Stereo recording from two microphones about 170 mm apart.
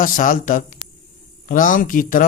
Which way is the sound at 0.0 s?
50° left (ahead or behind).